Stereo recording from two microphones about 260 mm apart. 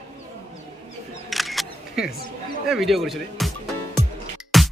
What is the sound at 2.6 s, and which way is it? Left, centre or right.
Speech, centre.